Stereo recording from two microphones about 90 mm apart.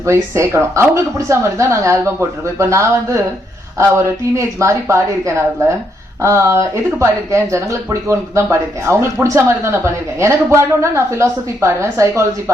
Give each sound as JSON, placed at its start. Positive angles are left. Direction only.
{"t": 0.0, "sound": "a woman's voice", "side_deg": -30}